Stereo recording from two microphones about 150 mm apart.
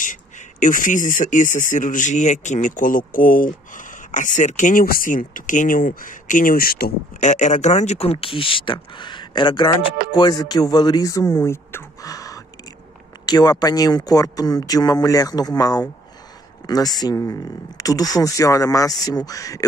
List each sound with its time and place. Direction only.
0.0 s speech: 60° left (ahead or behind); by 19.6 s 25° left (ahead or behind)